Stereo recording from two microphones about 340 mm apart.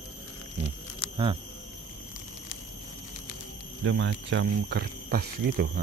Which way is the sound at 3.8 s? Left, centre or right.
Right.